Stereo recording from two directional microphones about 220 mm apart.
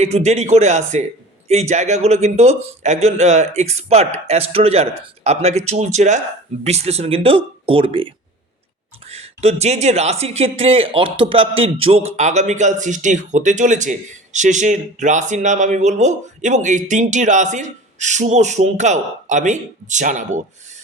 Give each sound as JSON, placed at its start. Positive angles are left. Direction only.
{"t": 0.0, "sound": "a man's voice", "side_deg": -30}
{"t": 9.0, "sound": "speech", "side_deg": -30}